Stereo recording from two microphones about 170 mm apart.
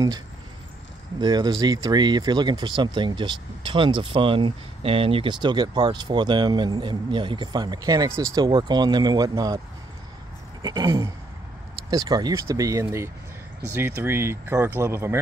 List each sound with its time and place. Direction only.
1.2 s speech: 25° right (ahead or behind)
10.6 s speech: 20° right (ahead or behind)